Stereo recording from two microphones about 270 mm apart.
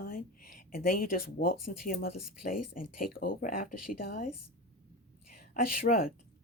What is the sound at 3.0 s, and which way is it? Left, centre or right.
Speech, left.